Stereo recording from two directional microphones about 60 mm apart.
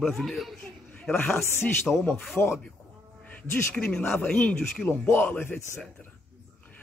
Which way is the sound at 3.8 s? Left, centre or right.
Left.